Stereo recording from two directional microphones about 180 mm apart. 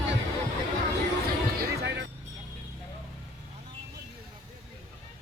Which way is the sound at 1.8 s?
75° right (ahead or behind).